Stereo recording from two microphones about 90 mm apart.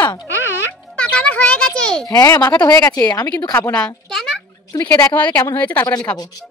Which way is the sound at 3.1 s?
50° left (ahead or behind).